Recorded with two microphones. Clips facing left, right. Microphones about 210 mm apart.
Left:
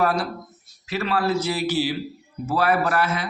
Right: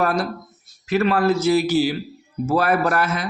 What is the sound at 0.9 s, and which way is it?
Speech, 50° right (ahead or behind).